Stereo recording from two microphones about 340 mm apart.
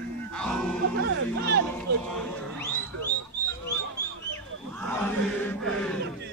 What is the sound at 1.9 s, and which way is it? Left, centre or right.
Music, right.